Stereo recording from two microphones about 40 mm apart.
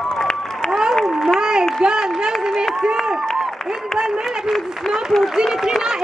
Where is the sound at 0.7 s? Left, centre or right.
Centre.